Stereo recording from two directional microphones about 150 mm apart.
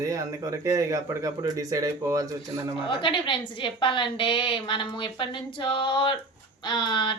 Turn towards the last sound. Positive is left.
turn(degrees=30)  # may be behind; listen again after turning